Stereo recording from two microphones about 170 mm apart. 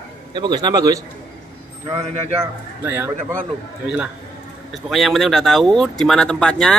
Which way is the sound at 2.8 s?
15° right (ahead or behind).